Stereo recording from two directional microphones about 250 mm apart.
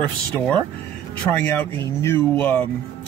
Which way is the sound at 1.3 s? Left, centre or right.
Centre.